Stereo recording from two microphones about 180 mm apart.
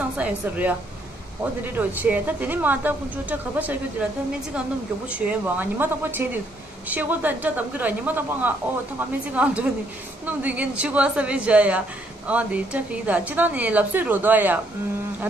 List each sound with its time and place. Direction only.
0.2 s speech: 10° right (ahead or behind)
5.2 s speech: 10° right (ahead or behind)